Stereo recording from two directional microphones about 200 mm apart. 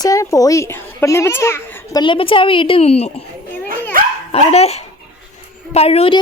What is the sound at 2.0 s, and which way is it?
A woman's voice, 25° left (ahead or behind).